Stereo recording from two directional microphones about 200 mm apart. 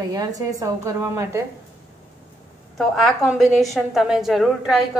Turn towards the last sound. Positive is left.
turn(degrees=0)  # may be behind; listen again after turning